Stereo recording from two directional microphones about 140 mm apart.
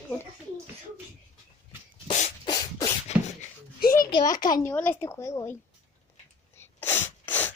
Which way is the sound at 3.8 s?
90° left.